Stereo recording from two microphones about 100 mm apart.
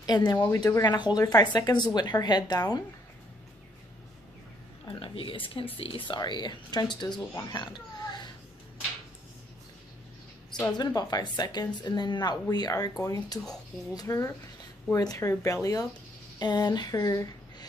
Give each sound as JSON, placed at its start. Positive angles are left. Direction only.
{"t": 0.0, "sound": "speech", "side_deg": 45}
{"t": 4.8, "sound": "speech", "side_deg": 55}
{"t": 7.4, "sound": "a sound", "side_deg": 50}
{"t": 10.8, "sound": "speech", "side_deg": 40}